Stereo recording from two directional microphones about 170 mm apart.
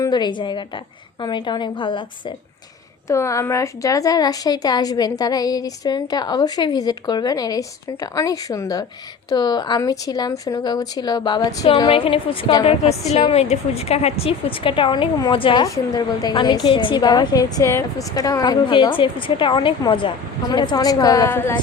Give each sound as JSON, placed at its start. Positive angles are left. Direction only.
{"t": 0.0, "sound": "a woman's voice", "side_deg": 25}
{"t": 3.1, "sound": "a woman's voice", "side_deg": 15}